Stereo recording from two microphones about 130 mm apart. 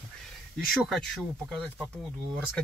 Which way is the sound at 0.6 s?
Centre (ahead or behind).